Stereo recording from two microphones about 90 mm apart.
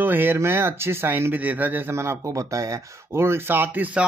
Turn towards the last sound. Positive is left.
turn(degrees=-20)  # may be behind; listen again after turning